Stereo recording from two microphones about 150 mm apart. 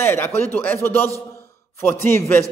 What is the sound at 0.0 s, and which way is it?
A man's voice, 15° left (ahead or behind).